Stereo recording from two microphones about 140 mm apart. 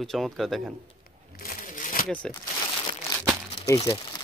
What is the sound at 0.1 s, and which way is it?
Speech, centre (ahead or behind).